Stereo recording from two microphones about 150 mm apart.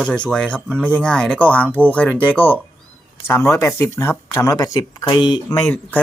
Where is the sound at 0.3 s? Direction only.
5° left (ahead or behind); by 5.4 s 30° left (ahead or behind).